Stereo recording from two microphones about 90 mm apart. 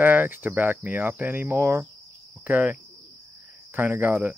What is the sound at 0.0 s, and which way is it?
Speech, 20° right (ahead or behind).